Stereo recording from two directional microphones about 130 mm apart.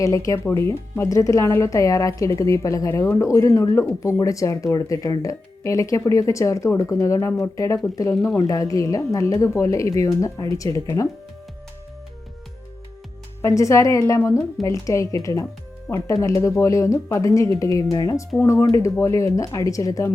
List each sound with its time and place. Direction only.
0.0 s speech: 25° left (ahead or behind)
13.4 s speech: 25° left (ahead or behind)